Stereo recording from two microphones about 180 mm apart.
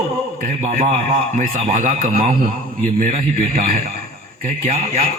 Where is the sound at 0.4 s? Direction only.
40° right (ahead or behind).